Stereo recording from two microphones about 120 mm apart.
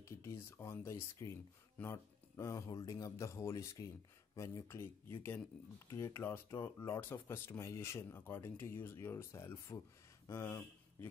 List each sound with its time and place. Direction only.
0.0 s speech: 20° left (ahead or behind)